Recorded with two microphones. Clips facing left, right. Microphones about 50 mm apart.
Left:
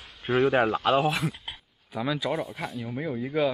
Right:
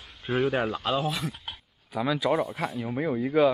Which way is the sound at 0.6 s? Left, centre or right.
Left.